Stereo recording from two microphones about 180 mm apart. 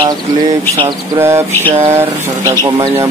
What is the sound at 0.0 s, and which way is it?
Speech, 25° right (ahead or behind).